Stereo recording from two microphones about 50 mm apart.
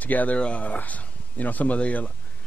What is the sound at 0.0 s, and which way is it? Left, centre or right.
A man's voice, left.